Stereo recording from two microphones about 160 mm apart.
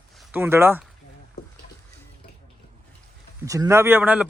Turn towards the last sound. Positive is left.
turn(degrees=-10)  # may be behind; listen again after turning